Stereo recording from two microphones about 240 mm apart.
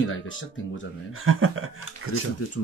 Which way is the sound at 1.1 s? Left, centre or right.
Right.